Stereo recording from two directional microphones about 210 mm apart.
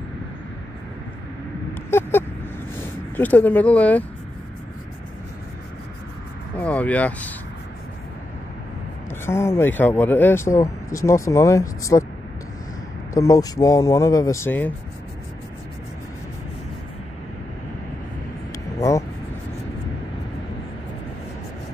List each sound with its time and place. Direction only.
1.7 s a sound: 10° left (ahead or behind)
3.2 s speech: 10° left (ahead or behind)
6.5 s speech: 5° left (ahead or behind)
9.2 s speech: 10° left (ahead or behind)
13.1 s speech: 15° left (ahead or behind)
18.8 s vehicle: 15° left (ahead or behind)